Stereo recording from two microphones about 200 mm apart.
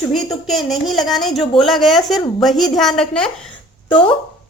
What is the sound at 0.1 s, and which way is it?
A woman's voice, centre (ahead or behind).